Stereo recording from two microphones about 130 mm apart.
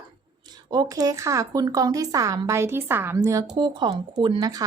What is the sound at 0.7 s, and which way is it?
A woman's voice, 30° right (ahead or behind).